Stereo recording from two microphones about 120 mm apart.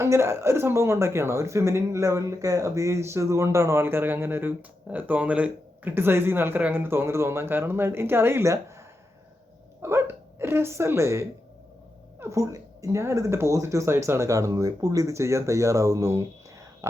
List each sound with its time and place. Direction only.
0.0 s speech: 25° right (ahead or behind)
9.8 s speech: 20° right (ahead or behind)